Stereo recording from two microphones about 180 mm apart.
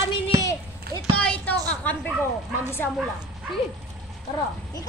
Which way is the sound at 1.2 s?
5° left (ahead or behind).